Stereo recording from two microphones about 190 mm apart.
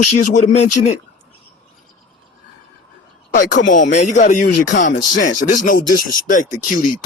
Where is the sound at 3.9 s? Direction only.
40° left (ahead or behind).